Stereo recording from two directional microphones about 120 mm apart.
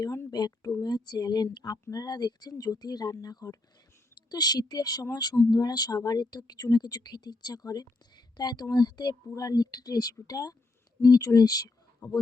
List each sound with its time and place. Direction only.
0.3 s speech: 35° left (ahead or behind)